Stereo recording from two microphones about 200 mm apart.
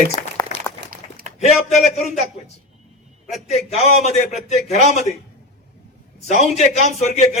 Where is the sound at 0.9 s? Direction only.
45° right (ahead or behind).